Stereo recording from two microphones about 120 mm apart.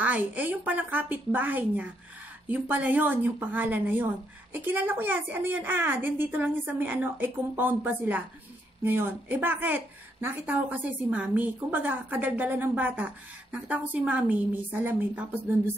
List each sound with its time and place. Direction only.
0.0 s speech: 15° right (ahead or behind)